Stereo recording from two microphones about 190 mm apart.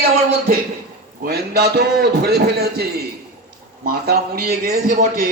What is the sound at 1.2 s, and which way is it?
A man's voice, 55° right (ahead or behind).